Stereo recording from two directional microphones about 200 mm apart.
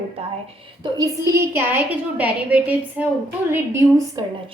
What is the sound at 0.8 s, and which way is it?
A woman's voice, 20° right (ahead or behind).